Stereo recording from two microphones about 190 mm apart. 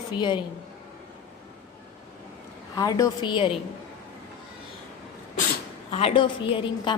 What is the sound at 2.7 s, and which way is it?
Speech, 20° left (ahead or behind).